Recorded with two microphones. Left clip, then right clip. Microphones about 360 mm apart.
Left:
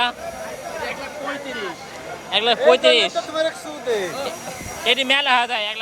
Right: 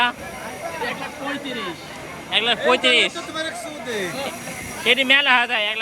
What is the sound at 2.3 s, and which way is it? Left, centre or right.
Speech, centre.